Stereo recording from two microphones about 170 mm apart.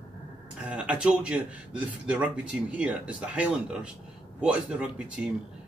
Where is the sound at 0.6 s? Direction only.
5° right (ahead or behind).